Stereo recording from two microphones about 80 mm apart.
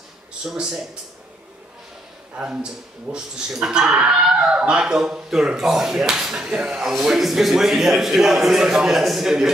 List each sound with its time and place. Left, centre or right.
0.5 s speech: centre
2.3 s speech: centre